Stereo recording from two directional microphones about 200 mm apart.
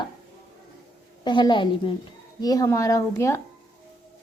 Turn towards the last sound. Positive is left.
turn(degrees=15)  # may be behind; listen again after turning